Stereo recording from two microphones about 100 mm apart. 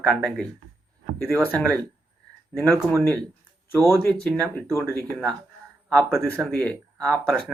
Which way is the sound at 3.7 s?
35° right (ahead or behind).